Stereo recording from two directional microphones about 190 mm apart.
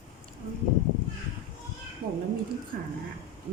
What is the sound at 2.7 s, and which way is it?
Speech, 50° right (ahead or behind).